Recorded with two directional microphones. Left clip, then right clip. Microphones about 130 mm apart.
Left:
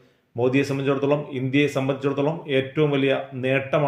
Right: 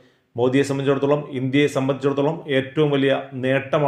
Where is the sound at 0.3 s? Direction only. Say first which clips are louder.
Right 2 dB; 30° right (ahead or behind).